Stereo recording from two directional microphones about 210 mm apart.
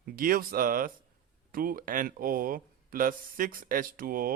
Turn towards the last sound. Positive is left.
turn(degrees=-40)  # may be behind; listen again after turning